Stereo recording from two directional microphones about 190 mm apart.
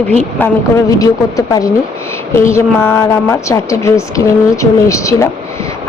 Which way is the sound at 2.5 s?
15° left (ahead or behind).